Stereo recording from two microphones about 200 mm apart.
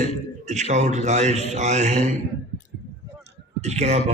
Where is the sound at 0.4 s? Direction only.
35° right (ahead or behind).